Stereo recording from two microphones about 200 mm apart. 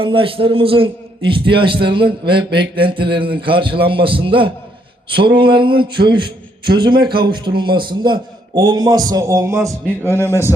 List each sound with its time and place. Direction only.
0.0 s a man's voice: 25° right (ahead or behind)
10.0 s a man's voice: 10° left (ahead or behind)